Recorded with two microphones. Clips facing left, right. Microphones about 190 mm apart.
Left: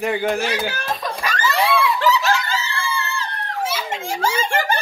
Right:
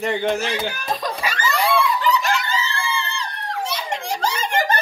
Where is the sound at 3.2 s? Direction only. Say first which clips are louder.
Left 2 dB; 5° left (ahead or behind).